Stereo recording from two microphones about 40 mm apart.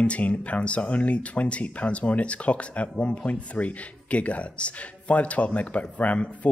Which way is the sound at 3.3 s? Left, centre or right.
Left.